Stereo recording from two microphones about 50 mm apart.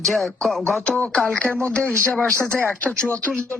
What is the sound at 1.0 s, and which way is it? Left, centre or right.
Speech, left.